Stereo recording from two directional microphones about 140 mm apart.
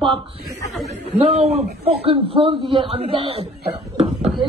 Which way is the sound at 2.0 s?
40° right (ahead or behind).